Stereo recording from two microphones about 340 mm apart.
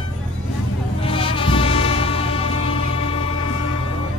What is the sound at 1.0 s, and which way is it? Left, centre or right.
Music, centre.